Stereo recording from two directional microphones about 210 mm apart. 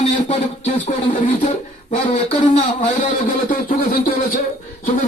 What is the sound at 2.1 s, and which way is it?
Speech, 35° left (ahead or behind).